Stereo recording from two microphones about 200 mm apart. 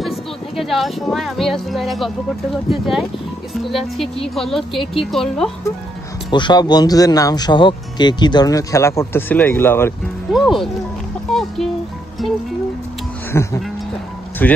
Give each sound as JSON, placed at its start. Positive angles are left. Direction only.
{"t": 0.0, "sound": "speech", "side_deg": 0}
{"t": 6.3, "sound": "speech", "side_deg": 20}
{"t": 10.3, "sound": "speech", "side_deg": 0}
{"t": 12.2, "sound": "speech", "side_deg": 0}
{"t": 13.3, "sound": "speech", "side_deg": 15}